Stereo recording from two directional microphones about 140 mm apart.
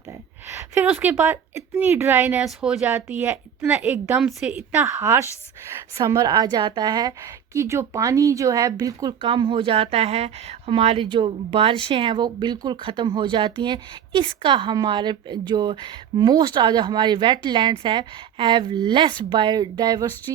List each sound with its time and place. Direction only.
0.4 s a woman's voice: 15° right (ahead or behind); by 4.5 s centre (ahead or behind)
4.5 s a woman's voice: 15° right (ahead or behind)